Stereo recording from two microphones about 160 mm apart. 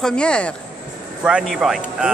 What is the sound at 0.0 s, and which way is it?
Speech, 5° left (ahead or behind).